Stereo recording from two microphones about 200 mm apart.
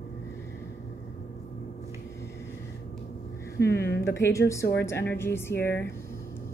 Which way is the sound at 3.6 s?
15° left (ahead or behind).